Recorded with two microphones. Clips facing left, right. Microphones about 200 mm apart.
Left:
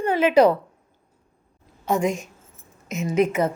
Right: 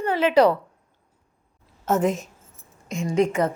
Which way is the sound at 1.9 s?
5° right (ahead or behind).